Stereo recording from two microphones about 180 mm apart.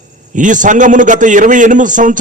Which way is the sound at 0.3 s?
45° right (ahead or behind).